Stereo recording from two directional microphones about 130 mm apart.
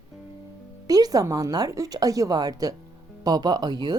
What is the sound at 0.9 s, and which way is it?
Speech, 30° right (ahead or behind).